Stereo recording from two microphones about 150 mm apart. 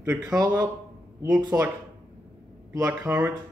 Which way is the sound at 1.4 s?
20° right (ahead or behind).